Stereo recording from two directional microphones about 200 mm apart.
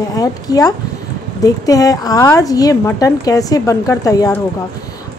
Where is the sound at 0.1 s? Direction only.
20° left (ahead or behind).